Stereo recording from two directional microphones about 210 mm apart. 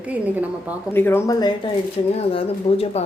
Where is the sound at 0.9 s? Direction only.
10° left (ahead or behind).